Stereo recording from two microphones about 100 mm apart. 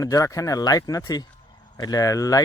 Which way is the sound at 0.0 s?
35° left (ahead or behind).